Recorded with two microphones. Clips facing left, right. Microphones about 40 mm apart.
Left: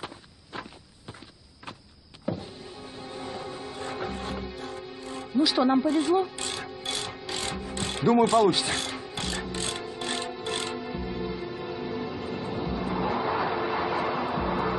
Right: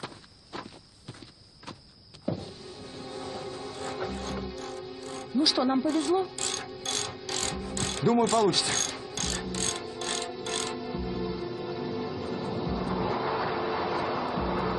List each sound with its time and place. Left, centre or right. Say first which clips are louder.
0.0 s a sound: left 1 dB; left
2.3 s power windows: left 1 dB; left
3.0 s music: left 1 dB; centre